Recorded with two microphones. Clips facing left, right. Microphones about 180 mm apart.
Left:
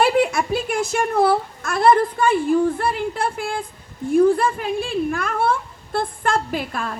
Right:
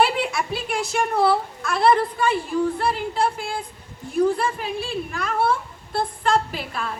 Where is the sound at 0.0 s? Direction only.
45° left (ahead or behind).